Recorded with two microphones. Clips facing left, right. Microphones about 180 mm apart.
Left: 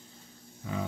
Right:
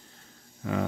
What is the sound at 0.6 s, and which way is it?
Dog, 65° right (ahead or behind).